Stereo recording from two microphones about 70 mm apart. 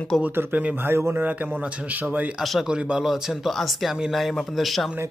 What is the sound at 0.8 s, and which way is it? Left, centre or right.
Speech, right.